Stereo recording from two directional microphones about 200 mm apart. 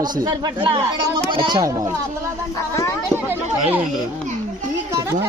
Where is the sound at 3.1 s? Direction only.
10° right (ahead or behind).